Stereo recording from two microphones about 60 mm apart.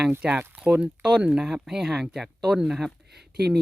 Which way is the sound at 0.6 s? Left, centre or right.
Right.